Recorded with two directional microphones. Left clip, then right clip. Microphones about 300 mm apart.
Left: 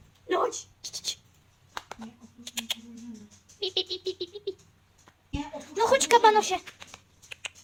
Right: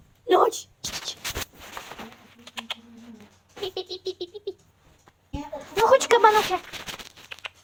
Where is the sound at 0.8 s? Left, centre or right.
Centre.